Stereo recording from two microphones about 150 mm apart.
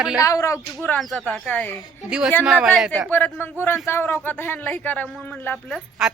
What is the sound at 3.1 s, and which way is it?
Speech, 10° left (ahead or behind).